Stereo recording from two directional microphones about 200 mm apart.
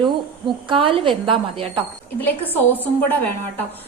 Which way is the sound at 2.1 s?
10° left (ahead or behind).